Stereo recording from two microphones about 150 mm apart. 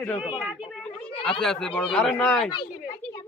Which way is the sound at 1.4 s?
5° left (ahead or behind).